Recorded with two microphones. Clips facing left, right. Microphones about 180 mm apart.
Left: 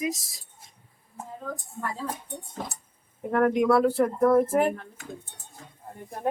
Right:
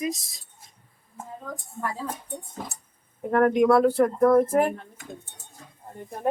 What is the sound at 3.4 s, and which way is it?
Speech, 5° left (ahead or behind).